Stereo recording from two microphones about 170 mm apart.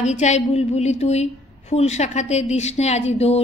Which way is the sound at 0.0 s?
45° left (ahead or behind).